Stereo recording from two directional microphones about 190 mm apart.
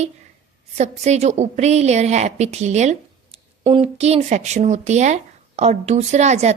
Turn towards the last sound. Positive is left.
turn(degrees=-35)  # may be behind; listen again after turning